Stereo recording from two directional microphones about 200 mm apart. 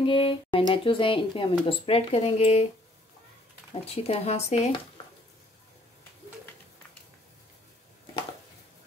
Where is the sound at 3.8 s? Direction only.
30° left (ahead or behind).